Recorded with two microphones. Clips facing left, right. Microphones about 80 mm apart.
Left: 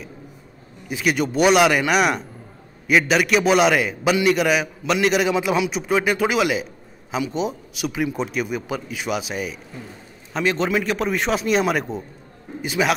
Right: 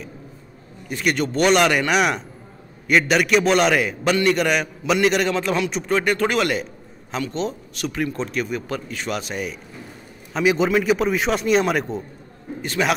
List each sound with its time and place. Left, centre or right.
0.8 s a man's voice: centre